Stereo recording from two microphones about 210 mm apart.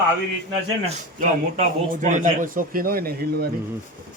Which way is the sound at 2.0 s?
35° right (ahead or behind).